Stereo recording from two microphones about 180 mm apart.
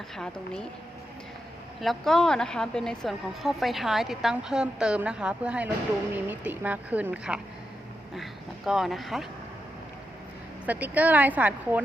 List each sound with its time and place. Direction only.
0.2 s a woman's voice: 5° left (ahead or behind)
1.8 s a woman's voice: centre (ahead or behind)
10.7 s a woman's voice: 10° right (ahead or behind)